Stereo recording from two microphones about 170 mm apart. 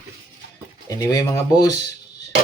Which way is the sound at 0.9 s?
20° left (ahead or behind).